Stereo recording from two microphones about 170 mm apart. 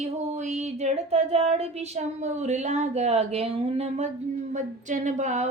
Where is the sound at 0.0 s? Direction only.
45° right (ahead or behind).